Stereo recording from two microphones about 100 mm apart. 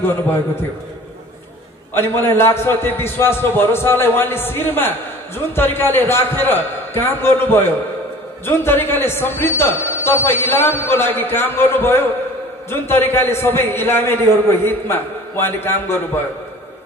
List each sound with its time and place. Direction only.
2.0 s a man's voice: 25° left (ahead or behind)